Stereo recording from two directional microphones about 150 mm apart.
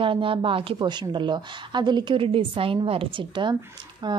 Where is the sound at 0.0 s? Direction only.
35° right (ahead or behind).